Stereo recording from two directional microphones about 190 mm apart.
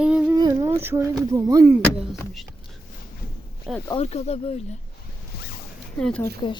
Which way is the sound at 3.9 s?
35° left (ahead or behind).